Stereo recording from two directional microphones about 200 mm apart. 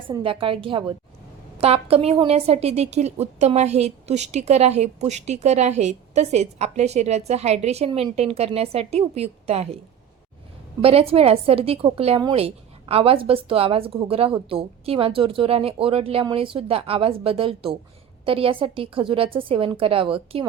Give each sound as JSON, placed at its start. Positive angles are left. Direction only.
{"t": 0.1, "sound": "a woman's voice", "side_deg": -25}
{"t": 10.8, "sound": "a woman's voice", "side_deg": -30}